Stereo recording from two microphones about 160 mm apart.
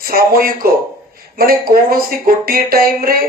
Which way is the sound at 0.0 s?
65° right (ahead or behind).